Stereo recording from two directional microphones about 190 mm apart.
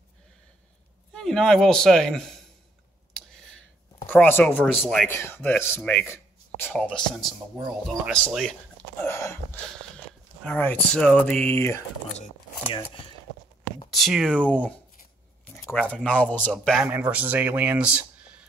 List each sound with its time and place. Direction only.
1.1 s a man's voice: 5° left (ahead or behind)
3.1 s clicking: 5° left (ahead or behind)
4.1 s speech: 10° left (ahead or behind)
12.2 s speech: 25° left (ahead or behind)
13.8 s speech: centre (ahead or behind)